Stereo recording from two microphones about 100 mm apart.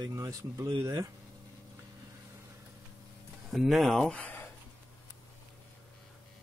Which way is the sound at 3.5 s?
Centre (ahead or behind).